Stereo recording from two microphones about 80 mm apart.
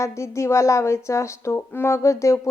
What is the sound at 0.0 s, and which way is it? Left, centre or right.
Speech, left.